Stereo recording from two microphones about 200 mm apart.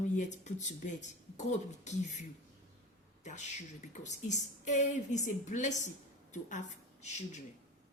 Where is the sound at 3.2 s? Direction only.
35° left (ahead or behind).